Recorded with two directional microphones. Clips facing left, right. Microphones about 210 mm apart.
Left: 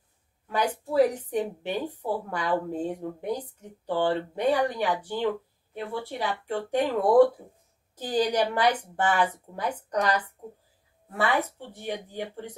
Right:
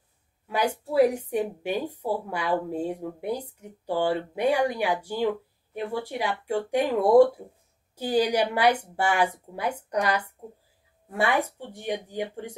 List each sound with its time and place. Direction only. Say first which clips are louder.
0.5 s a woman's voice: right 1 dB; 10° right (ahead or behind)